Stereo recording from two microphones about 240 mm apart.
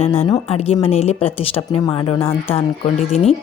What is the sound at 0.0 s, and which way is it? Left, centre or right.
A woman's voice, left.